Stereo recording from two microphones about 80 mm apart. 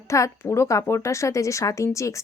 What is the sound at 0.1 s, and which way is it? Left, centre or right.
Speech, left.